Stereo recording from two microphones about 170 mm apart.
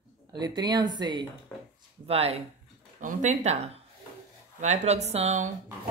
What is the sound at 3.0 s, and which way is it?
A woman's voice, 50° right (ahead or behind).